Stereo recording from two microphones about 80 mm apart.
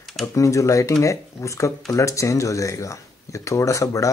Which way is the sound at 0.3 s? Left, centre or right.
Left.